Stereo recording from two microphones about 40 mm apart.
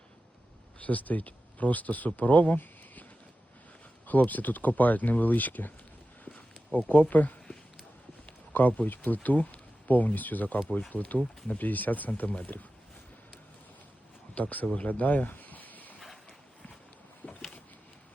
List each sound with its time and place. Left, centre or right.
0.8 s speech: left
2.6 s a sound: left
4.0 s speech: left
6.7 s speech: left
8.5 s speech: left
8.9 s speech: left
14.3 s speech: left
14.8 s a sound: left
17.2 s a sound: left